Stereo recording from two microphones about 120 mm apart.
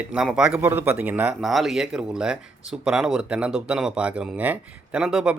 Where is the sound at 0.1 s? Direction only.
5° right (ahead or behind).